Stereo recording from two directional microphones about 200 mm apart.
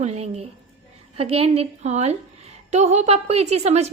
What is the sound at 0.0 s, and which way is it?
A woman's voice, 30° right (ahead or behind).